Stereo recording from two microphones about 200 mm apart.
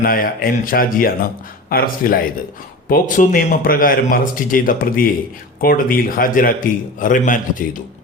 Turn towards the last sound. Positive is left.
turn(degrees=40)  # may be behind; listen again after turning